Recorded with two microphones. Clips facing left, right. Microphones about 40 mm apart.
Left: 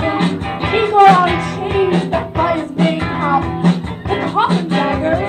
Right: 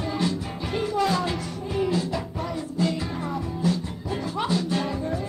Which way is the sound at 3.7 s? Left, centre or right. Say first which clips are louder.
Left 10 dB; left.